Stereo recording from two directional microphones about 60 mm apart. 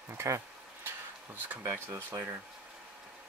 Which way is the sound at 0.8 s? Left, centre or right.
Right.